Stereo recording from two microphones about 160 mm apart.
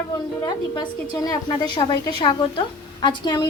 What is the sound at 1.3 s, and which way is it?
A woman's voice, 30° left (ahead or behind).